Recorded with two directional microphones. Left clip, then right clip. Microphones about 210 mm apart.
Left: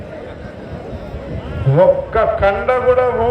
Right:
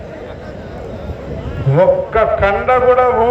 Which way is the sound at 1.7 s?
30° right (ahead or behind).